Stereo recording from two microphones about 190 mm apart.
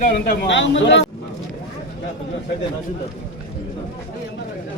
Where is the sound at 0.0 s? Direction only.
45° left (ahead or behind).